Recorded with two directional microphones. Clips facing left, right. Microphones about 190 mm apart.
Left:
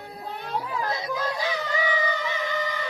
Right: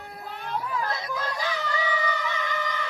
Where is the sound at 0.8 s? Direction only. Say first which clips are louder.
Left 2 dB; 20° left (ahead or behind).